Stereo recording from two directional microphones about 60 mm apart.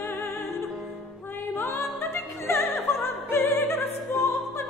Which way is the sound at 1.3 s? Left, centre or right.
Left.